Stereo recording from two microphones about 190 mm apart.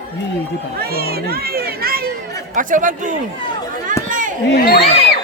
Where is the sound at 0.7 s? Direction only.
55° right (ahead or behind).